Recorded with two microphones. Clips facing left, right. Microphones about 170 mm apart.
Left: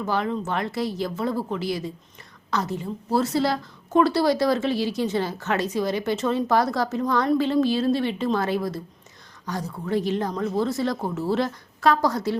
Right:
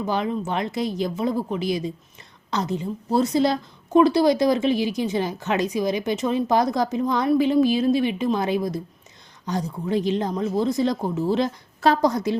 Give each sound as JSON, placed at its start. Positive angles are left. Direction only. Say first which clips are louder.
{"t": 0.0, "sound": "a woman's voice", "louder": "right 1 dB", "side_deg": -15}